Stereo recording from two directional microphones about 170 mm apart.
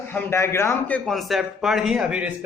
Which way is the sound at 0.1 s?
15° left (ahead or behind).